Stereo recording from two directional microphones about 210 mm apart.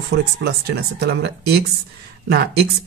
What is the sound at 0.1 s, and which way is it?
Speech, 50° right (ahead or behind).